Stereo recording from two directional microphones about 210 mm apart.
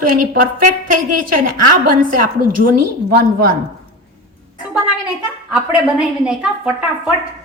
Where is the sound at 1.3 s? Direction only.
40° right (ahead or behind).